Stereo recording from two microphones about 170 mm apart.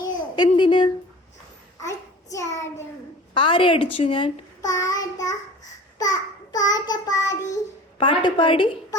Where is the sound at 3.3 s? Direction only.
30° left (ahead or behind).